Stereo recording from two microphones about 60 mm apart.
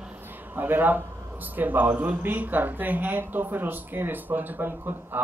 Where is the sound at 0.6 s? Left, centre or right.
Right.